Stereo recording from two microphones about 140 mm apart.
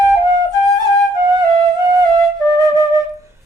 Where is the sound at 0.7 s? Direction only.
25° right (ahead or behind).